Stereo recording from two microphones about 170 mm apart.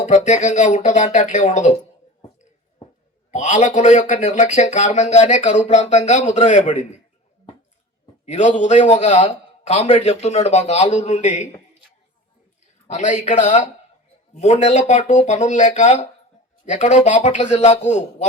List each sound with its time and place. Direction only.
0.0 s speech: 45° left (ahead or behind)
3.3 s speech: 45° left (ahead or behind)
8.2 s a man's voice: 45° left (ahead or behind)
12.9 s speech: 45° left (ahead or behind)